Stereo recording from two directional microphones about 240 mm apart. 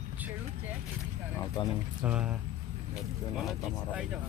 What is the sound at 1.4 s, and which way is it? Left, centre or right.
Speech, centre.